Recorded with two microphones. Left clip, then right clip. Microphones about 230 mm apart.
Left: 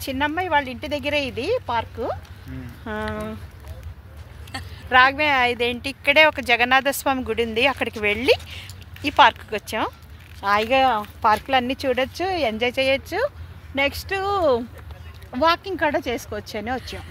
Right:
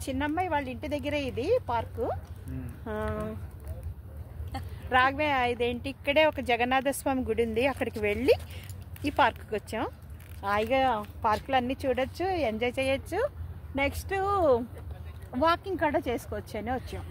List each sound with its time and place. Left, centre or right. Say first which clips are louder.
0.0 s speech: left 6 dB; left
4.8 s speech: left 9 dB; left; by 9.9 s centre
10.4 s speech: left 8 dB; left